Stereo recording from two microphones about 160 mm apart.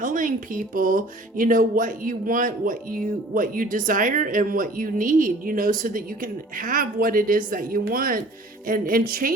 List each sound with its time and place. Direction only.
0.0 s speech: 55° right (ahead or behind)